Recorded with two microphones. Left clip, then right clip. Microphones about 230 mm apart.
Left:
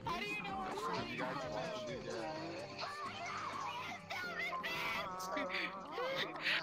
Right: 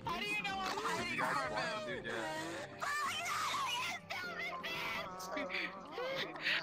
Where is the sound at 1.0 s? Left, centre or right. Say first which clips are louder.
Right 5 dB; right.